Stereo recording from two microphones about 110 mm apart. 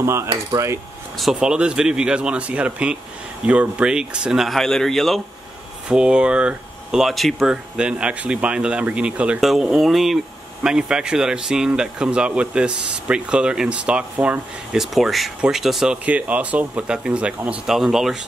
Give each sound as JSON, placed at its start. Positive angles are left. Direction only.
{"t": 0.0, "sound": "a sound", "side_deg": -25}
{"t": 1.1, "sound": "speech", "side_deg": -5}
{"t": 5.9, "sound": "speech", "side_deg": -10}